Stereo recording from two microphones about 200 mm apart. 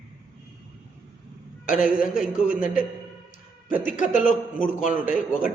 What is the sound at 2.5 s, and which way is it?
A man's voice, 40° left (ahead or behind).